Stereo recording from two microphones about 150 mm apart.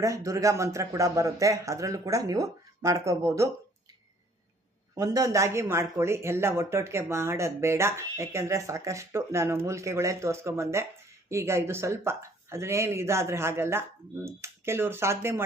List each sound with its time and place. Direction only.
0.0 s speech: 20° right (ahead or behind)
4.9 s speech: 25° right (ahead or behind)